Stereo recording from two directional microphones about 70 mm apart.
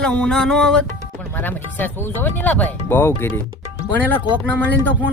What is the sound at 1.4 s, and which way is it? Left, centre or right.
Speech, left.